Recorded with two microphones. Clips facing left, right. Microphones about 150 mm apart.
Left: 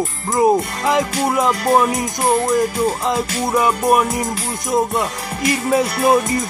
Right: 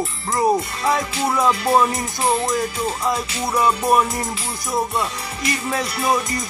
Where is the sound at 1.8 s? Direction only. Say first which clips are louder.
Left 2 dB; 10° left (ahead or behind).